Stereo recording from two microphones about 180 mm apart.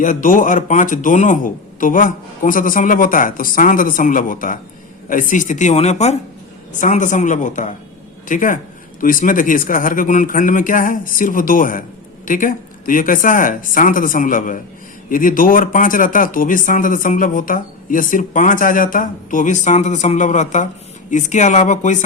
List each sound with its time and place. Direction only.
0.0 s a man's voice: 45° left (ahead or behind)